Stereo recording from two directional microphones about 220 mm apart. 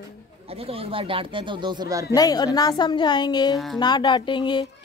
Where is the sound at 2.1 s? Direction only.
15° left (ahead or behind).